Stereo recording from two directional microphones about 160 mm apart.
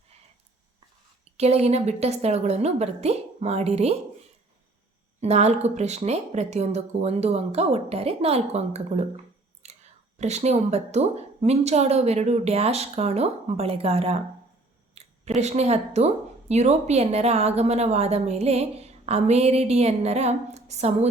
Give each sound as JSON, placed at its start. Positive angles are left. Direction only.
{"t": 1.4, "sound": "a woman's voice", "side_deg": -40}
{"t": 5.2, "sound": "speech", "side_deg": -45}
{"t": 9.6, "sound": "whispering", "side_deg": -45}
{"t": 10.2, "sound": "a woman's voice", "side_deg": -45}
{"t": 15.0, "sound": "a sound", "side_deg": -40}
{"t": 15.4, "sound": "a woman's voice", "side_deg": -45}